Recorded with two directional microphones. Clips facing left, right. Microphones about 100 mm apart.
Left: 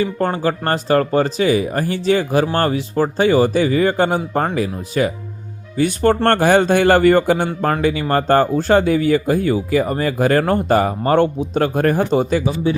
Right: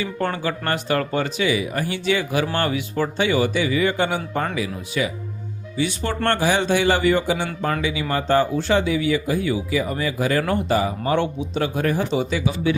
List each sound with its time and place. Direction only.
0.0 s a man's voice: 35° left (ahead or behind)